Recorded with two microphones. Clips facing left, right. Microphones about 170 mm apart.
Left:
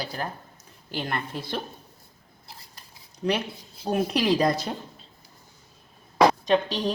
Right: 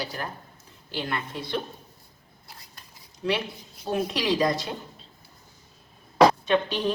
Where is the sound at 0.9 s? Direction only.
45° left (ahead or behind).